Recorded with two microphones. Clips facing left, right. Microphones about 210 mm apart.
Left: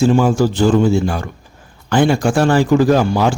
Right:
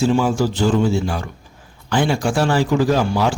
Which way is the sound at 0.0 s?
50° left (ahead or behind).